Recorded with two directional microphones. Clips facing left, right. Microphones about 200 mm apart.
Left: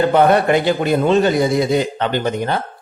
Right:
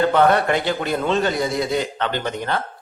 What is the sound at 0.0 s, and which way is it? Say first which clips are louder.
A man's voice: left 3 dB; 15° left (ahead or behind).